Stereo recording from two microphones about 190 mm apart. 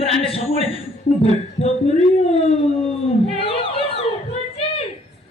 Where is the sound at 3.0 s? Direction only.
30° left (ahead or behind).